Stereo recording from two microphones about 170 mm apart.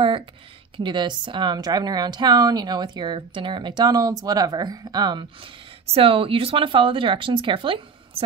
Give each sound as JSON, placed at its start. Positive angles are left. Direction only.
{"t": 0.7, "sound": "a woman's voice", "side_deg": -25}